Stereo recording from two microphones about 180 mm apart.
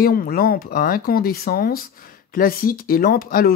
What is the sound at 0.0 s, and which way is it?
Speech, 55° left (ahead or behind).